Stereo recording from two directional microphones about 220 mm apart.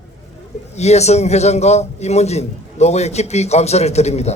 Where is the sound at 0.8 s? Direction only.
30° left (ahead or behind).